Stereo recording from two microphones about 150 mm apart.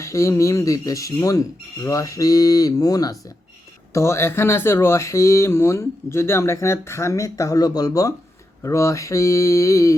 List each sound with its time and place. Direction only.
0.0 s speech: 20° left (ahead or behind)